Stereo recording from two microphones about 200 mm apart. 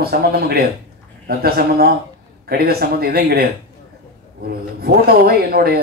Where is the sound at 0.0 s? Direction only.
50° right (ahead or behind).